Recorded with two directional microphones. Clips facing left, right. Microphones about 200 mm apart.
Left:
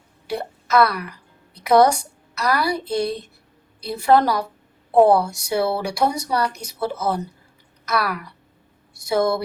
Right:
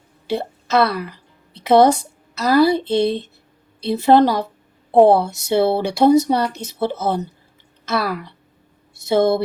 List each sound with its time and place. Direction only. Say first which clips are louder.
0.3 s a woman's voice: right 3 dB; 25° right (ahead or behind)